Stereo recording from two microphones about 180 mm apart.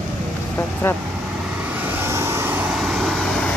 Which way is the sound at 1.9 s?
15° right (ahead or behind).